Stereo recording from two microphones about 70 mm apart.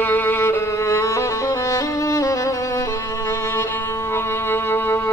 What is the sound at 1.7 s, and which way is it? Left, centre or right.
Music, left.